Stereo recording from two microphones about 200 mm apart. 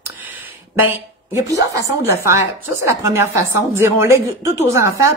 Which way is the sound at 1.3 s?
15° right (ahead or behind).